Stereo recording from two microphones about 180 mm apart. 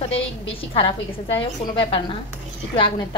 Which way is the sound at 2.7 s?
30° left (ahead or behind).